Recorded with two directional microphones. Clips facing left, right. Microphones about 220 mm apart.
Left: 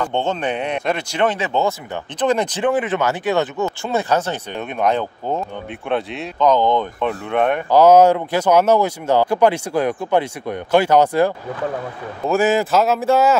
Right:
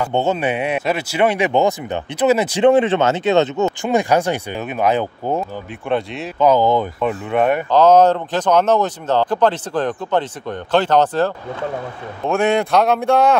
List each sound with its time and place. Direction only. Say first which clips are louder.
0.0 s speech: right 3 dB; 10° right (ahead or behind)
2.6 s speech: right 9 dB; 25° right (ahead or behind); by 7.6 s 5° right (ahead or behind)
7.7 s speech: left 2 dB; 10° left (ahead or behind)